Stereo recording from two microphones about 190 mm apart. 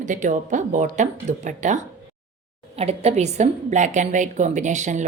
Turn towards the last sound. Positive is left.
turn(degrees=-40)  # may be behind; listen again after turning